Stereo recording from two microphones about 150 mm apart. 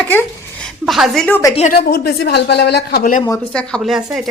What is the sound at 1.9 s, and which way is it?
Speech, 90° left.